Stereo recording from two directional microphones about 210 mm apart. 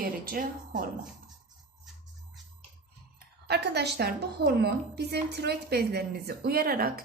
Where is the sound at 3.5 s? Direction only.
50° right (ahead or behind).